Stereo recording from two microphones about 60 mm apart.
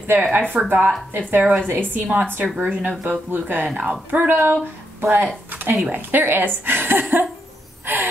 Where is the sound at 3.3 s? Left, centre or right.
Right.